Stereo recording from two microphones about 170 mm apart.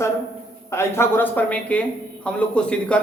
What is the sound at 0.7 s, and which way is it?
A man's voice, 15° left (ahead or behind).